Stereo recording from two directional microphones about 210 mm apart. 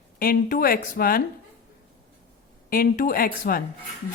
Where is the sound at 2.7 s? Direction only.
45° left (ahead or behind).